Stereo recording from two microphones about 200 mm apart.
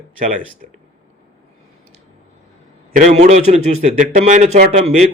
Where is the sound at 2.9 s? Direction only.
35° right (ahead or behind).